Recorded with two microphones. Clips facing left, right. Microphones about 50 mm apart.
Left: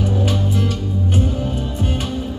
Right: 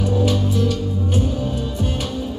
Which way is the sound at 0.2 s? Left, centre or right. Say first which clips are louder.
Right 1 dB; left.